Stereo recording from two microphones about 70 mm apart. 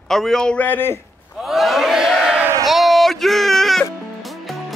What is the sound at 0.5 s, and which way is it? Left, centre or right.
Speech, left.